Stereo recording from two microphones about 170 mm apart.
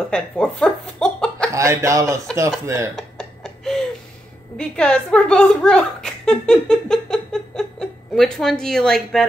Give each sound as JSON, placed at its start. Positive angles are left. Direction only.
{"t": 0.1, "sound": "speech", "side_deg": 5}
{"t": 1.5, "sound": "speech", "side_deg": -15}
{"t": 3.0, "sound": "music", "side_deg": 0}
{"t": 4.6, "sound": "speech", "side_deg": 5}